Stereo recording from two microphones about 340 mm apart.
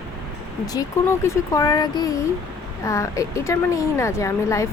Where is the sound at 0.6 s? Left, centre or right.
Centre.